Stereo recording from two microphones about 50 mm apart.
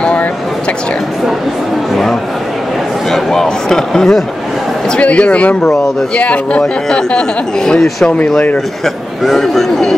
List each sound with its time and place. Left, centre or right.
0.0 s a sound: left
3.1 s speech: centre
4.8 s speech: left
6.6 s speech: centre